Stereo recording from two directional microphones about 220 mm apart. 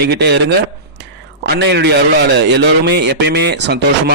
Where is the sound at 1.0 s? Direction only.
55° right (ahead or behind).